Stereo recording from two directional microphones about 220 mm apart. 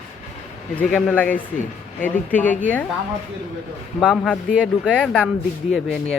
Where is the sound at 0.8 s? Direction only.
5° left (ahead or behind).